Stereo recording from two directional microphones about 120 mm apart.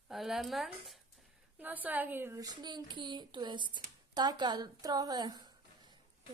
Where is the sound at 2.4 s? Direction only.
35° right (ahead or behind).